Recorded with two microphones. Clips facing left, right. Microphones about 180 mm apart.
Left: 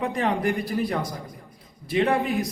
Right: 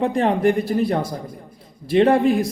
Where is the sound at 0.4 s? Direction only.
25° right (ahead or behind).